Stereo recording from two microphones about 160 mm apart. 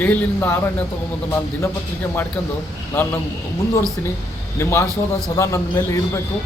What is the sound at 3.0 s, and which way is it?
Speech, 15° left (ahead or behind).